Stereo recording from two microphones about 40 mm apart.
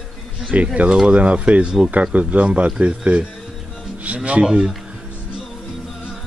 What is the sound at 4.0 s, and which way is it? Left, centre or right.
Speech, right.